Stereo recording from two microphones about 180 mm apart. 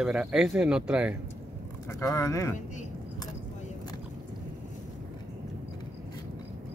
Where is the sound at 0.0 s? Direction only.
5° right (ahead or behind).